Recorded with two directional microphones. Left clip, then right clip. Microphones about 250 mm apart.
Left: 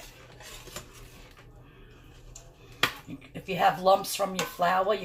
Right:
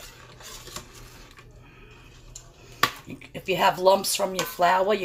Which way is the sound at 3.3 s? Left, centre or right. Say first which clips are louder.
Right 3 dB; right.